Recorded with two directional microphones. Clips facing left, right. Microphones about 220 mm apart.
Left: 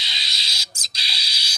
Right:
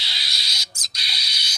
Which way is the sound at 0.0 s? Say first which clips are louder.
Even; 20° left (ahead or behind).